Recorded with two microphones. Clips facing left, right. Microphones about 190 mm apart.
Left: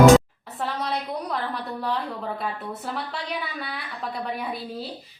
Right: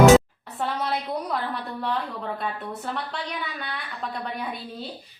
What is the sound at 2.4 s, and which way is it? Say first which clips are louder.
A woman's voice: even; centre (ahead or behind).